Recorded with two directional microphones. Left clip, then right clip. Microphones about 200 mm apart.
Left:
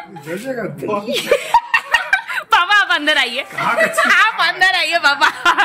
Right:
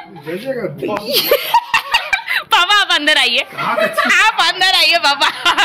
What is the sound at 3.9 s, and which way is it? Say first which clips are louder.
A woman's voice: right 3 dB; 5° right (ahead or behind).